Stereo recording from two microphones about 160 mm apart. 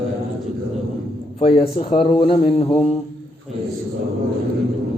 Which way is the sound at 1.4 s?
35° left (ahead or behind).